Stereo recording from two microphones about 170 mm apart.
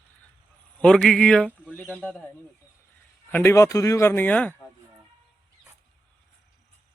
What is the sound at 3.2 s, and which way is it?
A man's voice, 15° left (ahead or behind).